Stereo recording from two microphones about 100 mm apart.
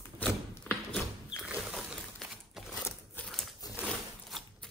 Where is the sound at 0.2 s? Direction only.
15° left (ahead or behind).